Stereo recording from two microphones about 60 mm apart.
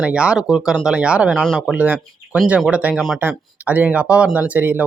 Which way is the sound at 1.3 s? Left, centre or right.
Centre.